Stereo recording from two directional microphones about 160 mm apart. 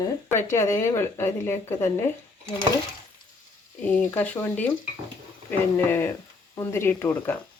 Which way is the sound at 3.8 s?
10° left (ahead or behind).